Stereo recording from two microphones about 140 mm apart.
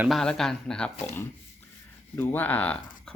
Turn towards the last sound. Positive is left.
turn(degrees=10)  # may be behind; listen again after turning